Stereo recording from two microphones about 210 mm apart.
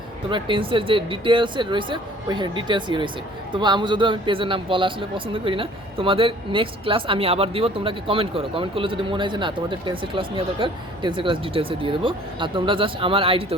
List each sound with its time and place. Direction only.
0.3 s a man's voice: 25° right (ahead or behind)